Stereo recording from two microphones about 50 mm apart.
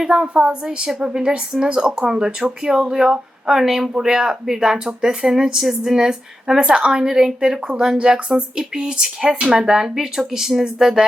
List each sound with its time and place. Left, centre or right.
0.0 s speech: centre